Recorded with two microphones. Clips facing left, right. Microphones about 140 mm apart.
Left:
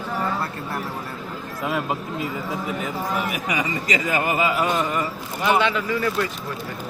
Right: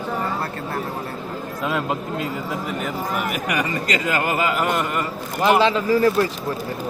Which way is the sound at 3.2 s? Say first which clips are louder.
Right 2 dB; 65° right (ahead or behind).